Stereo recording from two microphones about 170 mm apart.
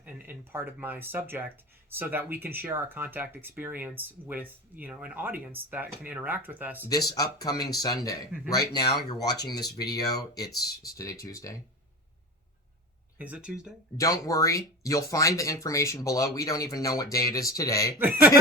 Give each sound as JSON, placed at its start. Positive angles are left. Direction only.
{"t": 0.0, "sound": "speech", "side_deg": -10}
{"t": 6.8, "sound": "speech", "side_deg": 20}
{"t": 13.1, "sound": "speech", "side_deg": -10}
{"t": 14.0, "sound": "speech", "side_deg": 20}
{"t": 17.9, "sound": "speech", "side_deg": -10}